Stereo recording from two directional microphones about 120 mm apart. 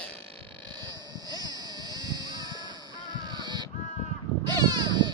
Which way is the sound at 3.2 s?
40° right (ahead or behind).